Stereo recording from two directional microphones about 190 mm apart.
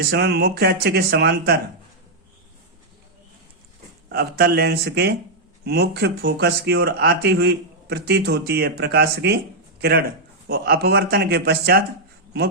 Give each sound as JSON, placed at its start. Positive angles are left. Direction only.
{"t": 0.1, "sound": "speech", "side_deg": -60}
{"t": 4.1, "sound": "speech", "side_deg": -55}